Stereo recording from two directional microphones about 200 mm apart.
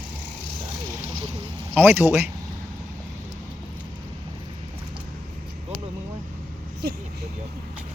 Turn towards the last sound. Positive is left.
turn(degrees=-55)  # may be behind; listen again after turning